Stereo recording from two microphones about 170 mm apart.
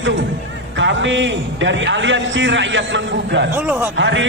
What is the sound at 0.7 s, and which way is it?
A man's voice, 90° right.